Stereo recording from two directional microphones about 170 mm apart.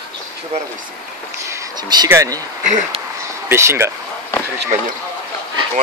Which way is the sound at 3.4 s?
15° right (ahead or behind).